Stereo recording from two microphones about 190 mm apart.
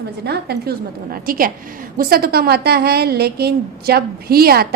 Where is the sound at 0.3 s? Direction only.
55° right (ahead or behind).